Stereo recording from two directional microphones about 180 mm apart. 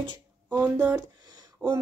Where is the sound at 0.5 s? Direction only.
10° right (ahead or behind).